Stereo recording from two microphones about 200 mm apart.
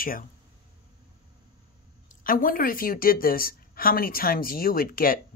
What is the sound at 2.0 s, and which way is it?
Speech, 45° left (ahead or behind).